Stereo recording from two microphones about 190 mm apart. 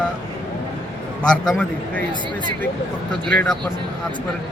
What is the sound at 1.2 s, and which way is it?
Speech, centre (ahead or behind).